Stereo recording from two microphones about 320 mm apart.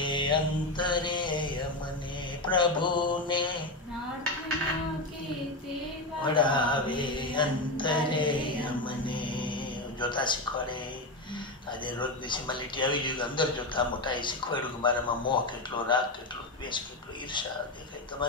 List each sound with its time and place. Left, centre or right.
0.0 s mantra: centre
6.2 s mantra: centre
11.8 s mantra: centre